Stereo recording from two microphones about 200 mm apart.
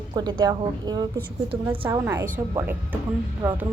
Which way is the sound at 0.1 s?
20° right (ahead or behind).